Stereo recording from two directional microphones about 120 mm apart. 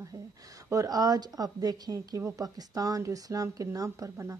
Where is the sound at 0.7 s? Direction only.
30° right (ahead or behind).